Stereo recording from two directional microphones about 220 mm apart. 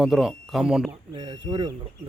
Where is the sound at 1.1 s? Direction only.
20° right (ahead or behind).